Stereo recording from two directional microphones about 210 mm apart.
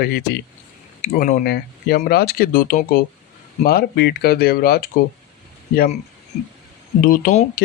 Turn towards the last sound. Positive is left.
turn(degrees=40)  # may be behind; listen again after turning